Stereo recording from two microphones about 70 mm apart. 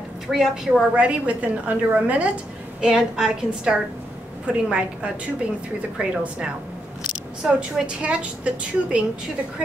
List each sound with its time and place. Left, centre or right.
0.3 s a woman's voice: centre
0.9 s a woman's voice: centre
2.8 s a woman's voice: centre